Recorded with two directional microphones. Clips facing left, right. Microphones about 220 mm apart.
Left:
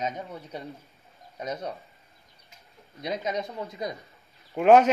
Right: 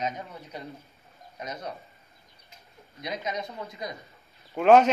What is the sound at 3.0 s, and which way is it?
Speech, 30° left (ahead or behind).